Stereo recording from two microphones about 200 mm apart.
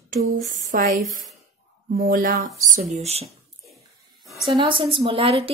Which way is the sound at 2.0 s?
45° right (ahead or behind).